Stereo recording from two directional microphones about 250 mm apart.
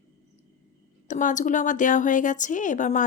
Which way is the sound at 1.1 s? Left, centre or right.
Left.